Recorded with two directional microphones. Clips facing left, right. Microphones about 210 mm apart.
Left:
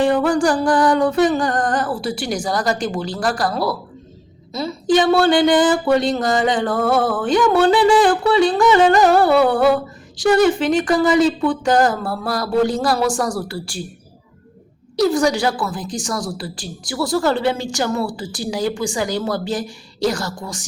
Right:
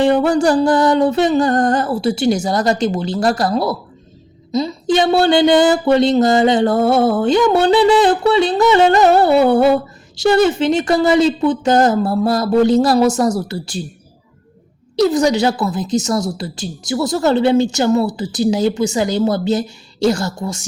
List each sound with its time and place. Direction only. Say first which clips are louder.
0.0 s speech: right 3 dB; 25° right (ahead or behind)
15.1 s speech: right 3 dB; 20° right (ahead or behind)